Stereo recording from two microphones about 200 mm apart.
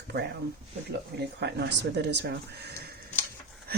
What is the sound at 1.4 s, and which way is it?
Speech, 55° right (ahead or behind).